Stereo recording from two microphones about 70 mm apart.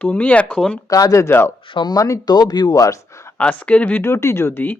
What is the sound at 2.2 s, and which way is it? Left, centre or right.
Speech, left.